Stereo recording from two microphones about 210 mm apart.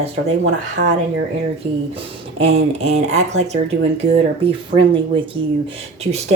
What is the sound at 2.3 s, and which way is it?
Speech, 25° right (ahead or behind).